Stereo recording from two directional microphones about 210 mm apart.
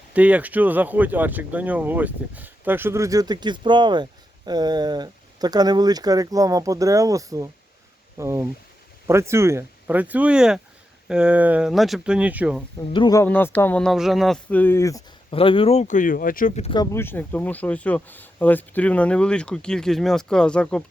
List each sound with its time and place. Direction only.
0.1 s speech: 5° right (ahead or behind)
12.9 s speech: 20° left (ahead or behind)
15.3 s speech: 25° left (ahead or behind); by 16.6 s 40° left (ahead or behind)
16.6 s speech: 20° left (ahead or behind)